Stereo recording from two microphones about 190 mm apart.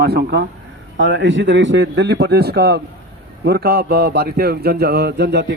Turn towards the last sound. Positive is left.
turn(degrees=-65)  # may be behind; listen again after turning